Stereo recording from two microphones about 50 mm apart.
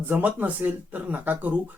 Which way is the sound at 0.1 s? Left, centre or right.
Right.